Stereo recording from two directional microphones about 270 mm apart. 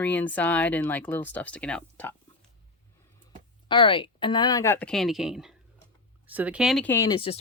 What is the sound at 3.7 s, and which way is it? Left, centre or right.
Speech, centre.